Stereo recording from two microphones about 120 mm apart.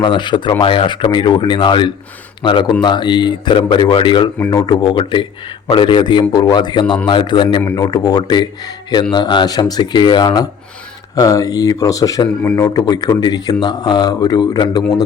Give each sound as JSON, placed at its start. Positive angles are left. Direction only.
{"t": 0.0, "sound": "speech", "side_deg": 40}
{"t": 4.5, "sound": "speech", "side_deg": 35}